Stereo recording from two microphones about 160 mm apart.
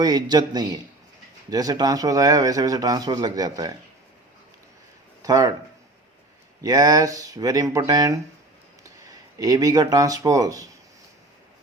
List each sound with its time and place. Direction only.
0.0 s speech: 25° right (ahead or behind)
5.2 s speech: 20° right (ahead or behind)
6.6 s speech: 25° right (ahead or behind)